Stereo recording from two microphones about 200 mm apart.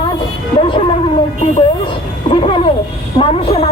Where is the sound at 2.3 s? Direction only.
25° left (ahead or behind).